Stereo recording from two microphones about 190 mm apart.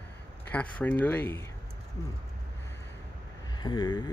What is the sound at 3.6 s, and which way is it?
Speech, 20° left (ahead or behind).